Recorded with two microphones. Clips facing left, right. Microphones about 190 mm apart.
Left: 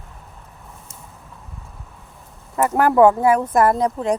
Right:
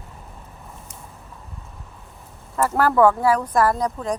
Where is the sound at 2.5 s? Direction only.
15° left (ahead or behind).